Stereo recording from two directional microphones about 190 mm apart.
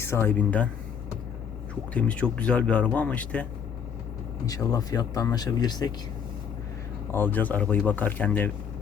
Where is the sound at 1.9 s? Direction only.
5° left (ahead or behind).